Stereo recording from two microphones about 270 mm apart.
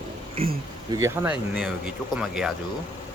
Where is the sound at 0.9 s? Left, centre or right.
Centre.